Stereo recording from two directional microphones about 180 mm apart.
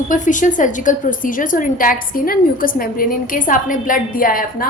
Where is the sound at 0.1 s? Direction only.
45° left (ahead or behind).